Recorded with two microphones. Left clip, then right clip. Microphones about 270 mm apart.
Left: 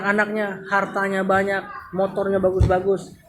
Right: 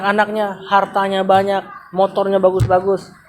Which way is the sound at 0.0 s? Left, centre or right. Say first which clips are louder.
Right 5 dB; right.